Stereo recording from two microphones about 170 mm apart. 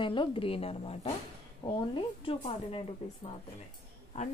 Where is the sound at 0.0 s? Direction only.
30° left (ahead or behind).